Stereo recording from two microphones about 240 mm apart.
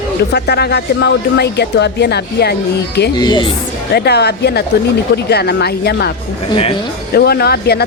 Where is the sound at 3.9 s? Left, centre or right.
Left.